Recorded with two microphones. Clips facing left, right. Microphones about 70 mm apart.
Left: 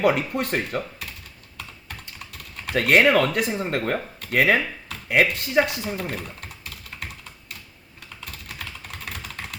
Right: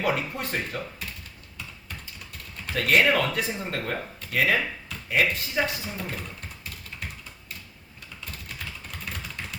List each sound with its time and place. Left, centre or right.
0.0 s speech: left
1.5 s typing: left
2.6 s speech: left
8.2 s typing: left